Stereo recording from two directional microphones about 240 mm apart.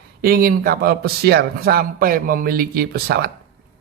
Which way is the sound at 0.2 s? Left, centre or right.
Right.